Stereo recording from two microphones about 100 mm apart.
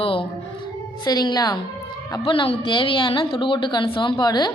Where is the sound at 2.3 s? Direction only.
55° left (ahead or behind).